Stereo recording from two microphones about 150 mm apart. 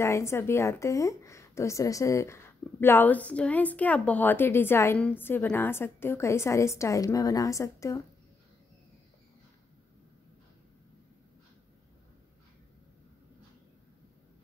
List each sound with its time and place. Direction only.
0.0 s a woman's voice: 20° left (ahead or behind)